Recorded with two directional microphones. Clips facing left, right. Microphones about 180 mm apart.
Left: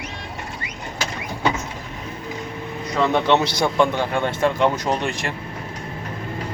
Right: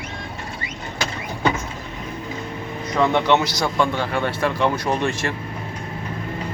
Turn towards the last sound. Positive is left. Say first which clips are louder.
# right 1 dB
turn(degrees=15)  # may be behind; listen again after turning